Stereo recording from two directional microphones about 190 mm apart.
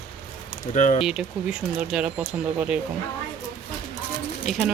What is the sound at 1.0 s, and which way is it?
Speech, 5° right (ahead or behind).